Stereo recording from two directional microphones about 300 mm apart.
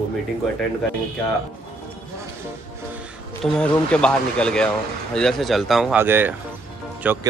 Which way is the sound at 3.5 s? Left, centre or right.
Centre.